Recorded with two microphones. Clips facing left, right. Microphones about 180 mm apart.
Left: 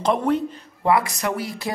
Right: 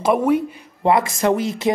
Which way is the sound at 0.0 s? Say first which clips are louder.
Right 4 dB; 10° right (ahead or behind).